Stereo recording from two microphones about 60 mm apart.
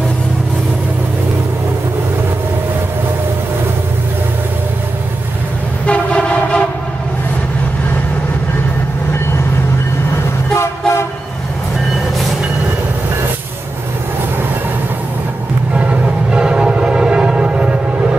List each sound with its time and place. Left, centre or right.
5.9 s train: centre
10.5 s train: left
15.7 s train: centre